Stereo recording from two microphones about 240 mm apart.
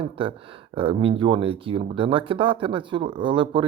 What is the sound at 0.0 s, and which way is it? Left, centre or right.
Speech, right.